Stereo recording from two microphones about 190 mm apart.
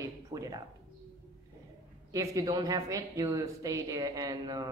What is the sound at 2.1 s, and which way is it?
Speech, 20° right (ahead or behind).